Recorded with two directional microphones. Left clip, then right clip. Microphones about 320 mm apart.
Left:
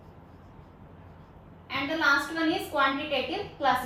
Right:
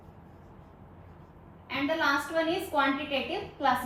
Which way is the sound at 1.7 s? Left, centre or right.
Centre.